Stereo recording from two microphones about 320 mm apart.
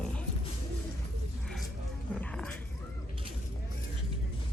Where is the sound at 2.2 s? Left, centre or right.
Centre.